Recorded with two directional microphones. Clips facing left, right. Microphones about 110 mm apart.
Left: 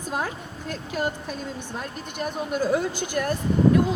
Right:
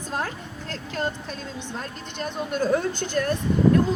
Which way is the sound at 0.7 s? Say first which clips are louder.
Left 1 dB; 10° left (ahead or behind).